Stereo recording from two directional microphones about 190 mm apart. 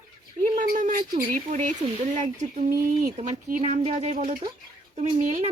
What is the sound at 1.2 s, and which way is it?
Speech, 45° right (ahead or behind).